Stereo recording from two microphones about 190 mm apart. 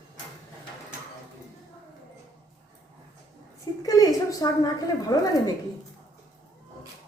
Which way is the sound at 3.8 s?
20° left (ahead or behind).